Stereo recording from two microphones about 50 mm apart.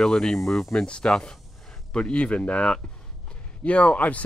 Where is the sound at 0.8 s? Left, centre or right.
Centre.